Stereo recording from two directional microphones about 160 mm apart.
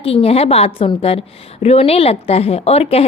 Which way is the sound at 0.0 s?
35° left (ahead or behind).